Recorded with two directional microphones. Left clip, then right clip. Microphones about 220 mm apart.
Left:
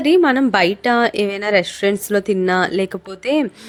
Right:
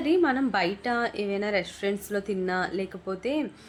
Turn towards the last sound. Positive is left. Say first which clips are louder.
# left 10 dB
turn(degrees=50)  # may be behind; listen again after turning